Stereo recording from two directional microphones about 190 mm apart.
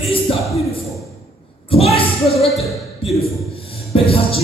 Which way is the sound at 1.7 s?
30° left (ahead or behind).